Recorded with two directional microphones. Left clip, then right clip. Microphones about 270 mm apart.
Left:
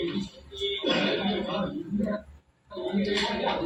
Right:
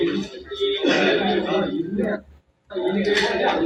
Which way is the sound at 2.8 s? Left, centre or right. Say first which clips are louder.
Right 8 dB; right.